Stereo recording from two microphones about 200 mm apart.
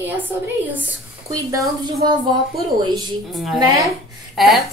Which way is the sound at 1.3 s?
15° right (ahead or behind).